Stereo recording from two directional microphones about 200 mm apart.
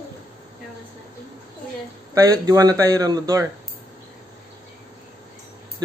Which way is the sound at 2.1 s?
15° right (ahead or behind).